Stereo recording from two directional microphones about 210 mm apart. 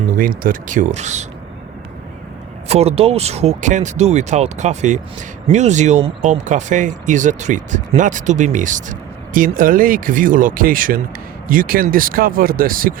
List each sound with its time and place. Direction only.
0.2 s speech: 40° right (ahead or behind)
2.6 s speech: 30° right (ahead or behind)